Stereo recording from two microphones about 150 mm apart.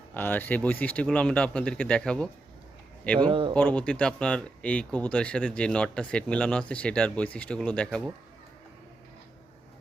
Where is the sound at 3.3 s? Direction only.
35° right (ahead or behind).